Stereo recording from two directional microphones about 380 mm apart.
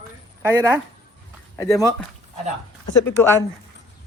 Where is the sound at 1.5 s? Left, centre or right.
Centre.